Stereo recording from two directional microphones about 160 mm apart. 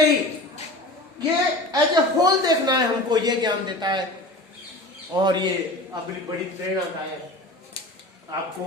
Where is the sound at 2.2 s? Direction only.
25° right (ahead or behind).